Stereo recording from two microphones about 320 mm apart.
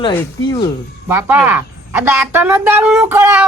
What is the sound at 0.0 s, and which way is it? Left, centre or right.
Speech, centre.